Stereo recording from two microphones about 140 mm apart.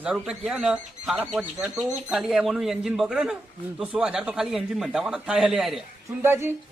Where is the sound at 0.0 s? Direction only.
5° right (ahead or behind).